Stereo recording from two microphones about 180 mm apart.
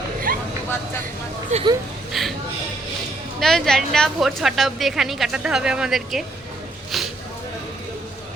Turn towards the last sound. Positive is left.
turn(degrees=0)  # may be behind; listen again after turning